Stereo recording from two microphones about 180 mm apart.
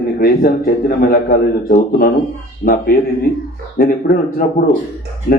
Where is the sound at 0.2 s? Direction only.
55° left (ahead or behind).